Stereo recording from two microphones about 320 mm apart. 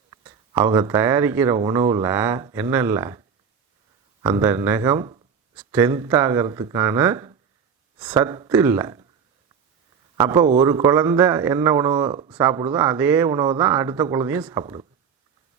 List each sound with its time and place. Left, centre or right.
0.1 s a man's voice: centre
10.2 s a man's voice: centre